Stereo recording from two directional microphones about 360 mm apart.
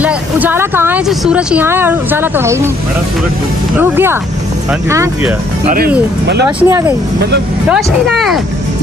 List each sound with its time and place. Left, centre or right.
0.0 s speech: centre
3.7 s speech: centre
6.6 s speech: centre